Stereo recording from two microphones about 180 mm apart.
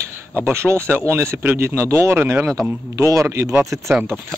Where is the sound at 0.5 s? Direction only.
15° right (ahead or behind).